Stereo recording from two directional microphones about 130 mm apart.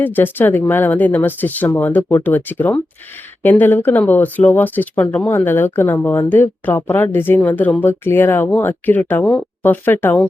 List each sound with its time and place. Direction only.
0.0 s speech: 15° left (ahead or behind)